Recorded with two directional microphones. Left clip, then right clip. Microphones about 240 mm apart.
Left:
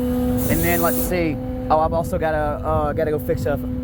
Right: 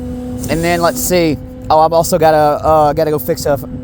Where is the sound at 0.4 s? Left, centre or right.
Right.